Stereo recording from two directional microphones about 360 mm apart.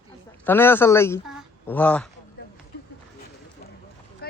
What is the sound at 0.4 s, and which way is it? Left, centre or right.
Speech, centre.